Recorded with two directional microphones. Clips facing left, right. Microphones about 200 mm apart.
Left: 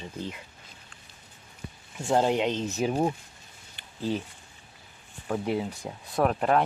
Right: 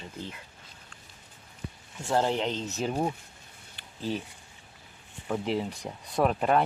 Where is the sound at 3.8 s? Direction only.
Centre (ahead or behind).